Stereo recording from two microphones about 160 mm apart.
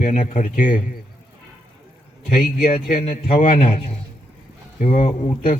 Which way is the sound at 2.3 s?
60° left (ahead or behind).